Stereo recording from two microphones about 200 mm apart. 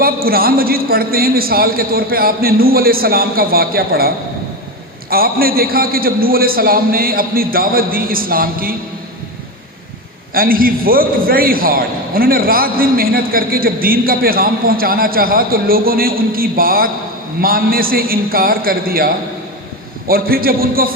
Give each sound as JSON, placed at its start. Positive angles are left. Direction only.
{"t": 0.0, "sound": "a man's voice", "side_deg": -50}
{"t": 10.3, "sound": "a man's voice", "side_deg": -45}